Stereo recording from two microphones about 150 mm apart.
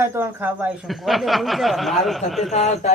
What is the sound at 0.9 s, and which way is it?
Speech, centre (ahead or behind).